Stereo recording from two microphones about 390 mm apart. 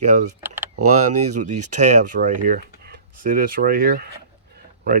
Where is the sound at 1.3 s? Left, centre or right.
Centre.